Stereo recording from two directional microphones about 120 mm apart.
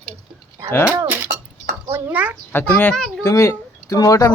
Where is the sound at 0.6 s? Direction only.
20° right (ahead or behind).